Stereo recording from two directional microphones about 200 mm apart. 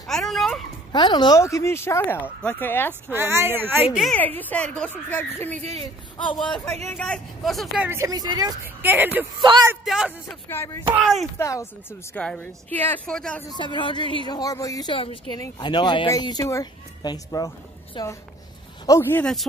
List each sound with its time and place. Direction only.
0.0 s a sound: centre (ahead or behind)
0.9 s speech: 20° left (ahead or behind)
2.9 s speech: 10° right (ahead or behind)
3.9 s speech: 5° left (ahead or behind)
6.9 s speech: 5° left (ahead or behind)
9.4 s speech: 20° right (ahead or behind)
9.8 s speech: 5° right (ahead or behind)
10.5 s speech: 10° left (ahead or behind)
11.0 s speech: centre (ahead or behind)
11.3 s speech: 15° left (ahead or behind)
13.6 s speech: 25° left (ahead or behind)
18.9 s speech: 10° left (ahead or behind)